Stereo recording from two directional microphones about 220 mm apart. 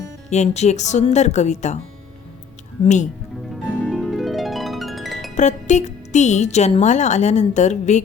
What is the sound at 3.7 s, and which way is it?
Harp, 5° left (ahead or behind).